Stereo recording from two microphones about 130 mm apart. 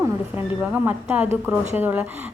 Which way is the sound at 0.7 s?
15° right (ahead or behind).